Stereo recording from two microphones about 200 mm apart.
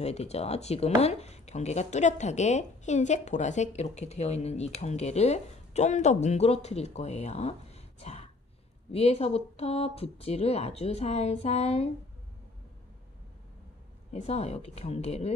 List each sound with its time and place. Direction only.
0.0 s speech: 30° left (ahead or behind)
14.2 s speech: 30° left (ahead or behind)